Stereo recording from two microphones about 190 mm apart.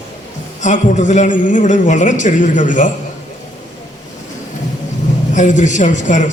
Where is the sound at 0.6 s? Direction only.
40° left (ahead or behind).